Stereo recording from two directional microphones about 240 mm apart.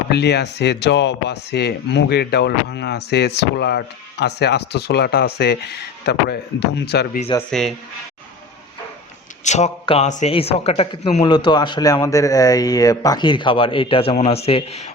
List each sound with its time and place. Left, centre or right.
0.1 s speech: left
7.3 s speech: centre
9.4 s a man's voice: left